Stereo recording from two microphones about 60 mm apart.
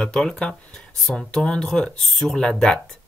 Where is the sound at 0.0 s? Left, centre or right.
Centre.